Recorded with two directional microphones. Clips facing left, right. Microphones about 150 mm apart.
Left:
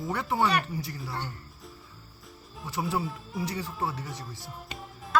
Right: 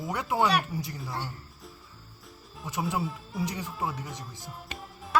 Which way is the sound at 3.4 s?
20° right (ahead or behind).